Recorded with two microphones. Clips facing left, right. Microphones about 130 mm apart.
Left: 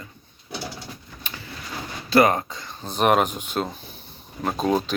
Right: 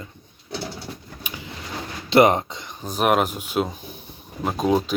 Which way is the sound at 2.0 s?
25° right (ahead or behind).